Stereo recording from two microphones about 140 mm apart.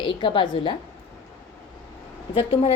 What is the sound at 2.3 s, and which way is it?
Speech, 40° left (ahead or behind).